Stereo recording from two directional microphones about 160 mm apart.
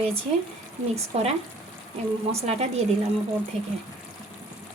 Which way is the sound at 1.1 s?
40° right (ahead or behind).